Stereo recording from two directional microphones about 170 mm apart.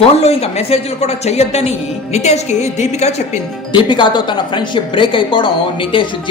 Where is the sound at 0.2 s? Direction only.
35° left (ahead or behind).